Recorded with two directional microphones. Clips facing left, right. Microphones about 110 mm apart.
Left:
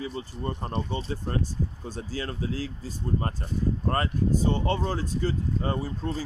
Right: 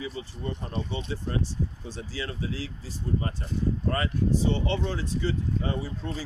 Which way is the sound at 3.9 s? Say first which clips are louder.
Left 1 dB; 45° left (ahead or behind).